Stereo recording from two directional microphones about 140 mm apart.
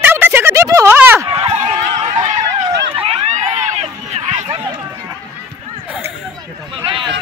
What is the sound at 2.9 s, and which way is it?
Run, 45° right (ahead or behind).